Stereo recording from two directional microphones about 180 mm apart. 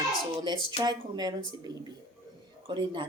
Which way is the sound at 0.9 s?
25° right (ahead or behind).